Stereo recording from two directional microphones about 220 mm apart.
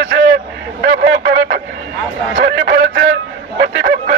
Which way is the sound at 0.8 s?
45° right (ahead or behind).